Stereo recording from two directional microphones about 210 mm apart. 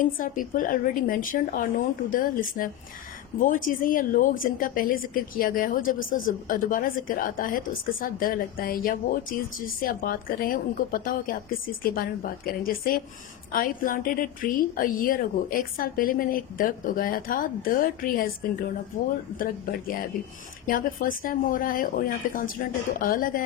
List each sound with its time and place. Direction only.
0.0 s a woman's voice: 40° left (ahead or behind)
20.1 s a woman's voice: 40° left (ahead or behind)